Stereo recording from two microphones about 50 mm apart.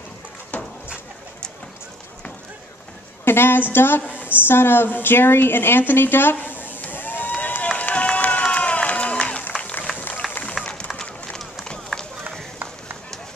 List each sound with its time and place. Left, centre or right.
3.3 s a woman's voice: left
4.2 s a sound: left
7.6 s run: left
10.6 s run: centre
11.0 s run: centre